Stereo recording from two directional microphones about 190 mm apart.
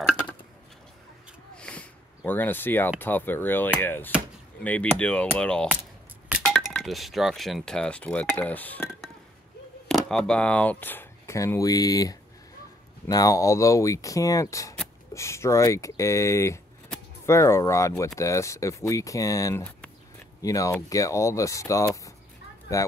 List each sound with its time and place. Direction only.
1.6 s a sound: 5° left (ahead or behind)
3.0 s speech: 10° left (ahead or behind)
9.8 s speech: centre (ahead or behind); by 22.1 s 15° left (ahead or behind)